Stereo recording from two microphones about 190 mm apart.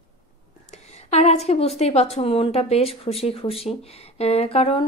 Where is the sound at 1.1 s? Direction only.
35° left (ahead or behind).